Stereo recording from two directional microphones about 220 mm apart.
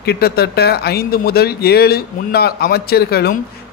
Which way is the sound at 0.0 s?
45° left (ahead or behind).